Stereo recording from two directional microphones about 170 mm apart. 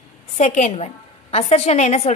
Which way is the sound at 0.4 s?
40° left (ahead or behind).